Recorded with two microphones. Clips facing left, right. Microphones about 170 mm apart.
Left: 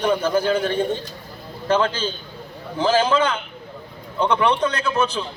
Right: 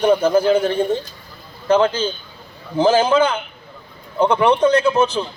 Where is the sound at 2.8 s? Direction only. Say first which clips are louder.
Right 4 dB; 30° right (ahead or behind).